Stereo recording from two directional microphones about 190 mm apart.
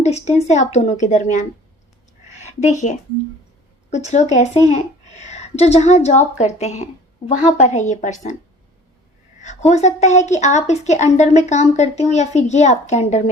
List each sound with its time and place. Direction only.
0.0 s a woman's voice: 35° left (ahead or behind)
9.4 s a woman's voice: 40° left (ahead or behind)